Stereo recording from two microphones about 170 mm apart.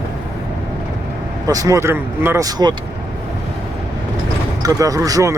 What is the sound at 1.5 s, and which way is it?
Speech, 20° right (ahead or behind).